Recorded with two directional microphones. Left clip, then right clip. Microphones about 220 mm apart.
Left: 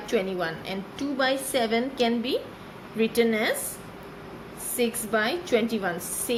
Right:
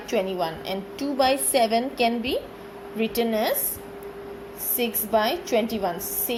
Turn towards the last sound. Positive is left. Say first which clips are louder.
# right 1 dB
turn(degrees=-10)  # may be behind; listen again after turning